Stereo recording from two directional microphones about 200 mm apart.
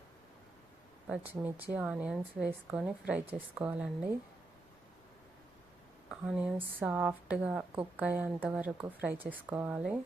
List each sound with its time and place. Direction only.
1.0 s a woman's voice: 5° right (ahead or behind)
6.1 s speech: 5° right (ahead or behind)